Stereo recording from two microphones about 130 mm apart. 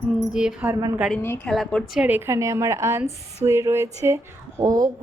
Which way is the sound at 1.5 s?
Centre (ahead or behind).